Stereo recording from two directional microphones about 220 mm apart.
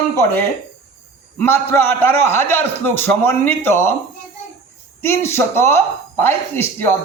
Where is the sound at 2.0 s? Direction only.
10° left (ahead or behind).